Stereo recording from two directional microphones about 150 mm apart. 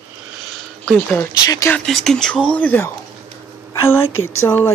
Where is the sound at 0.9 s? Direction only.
15° left (ahead or behind).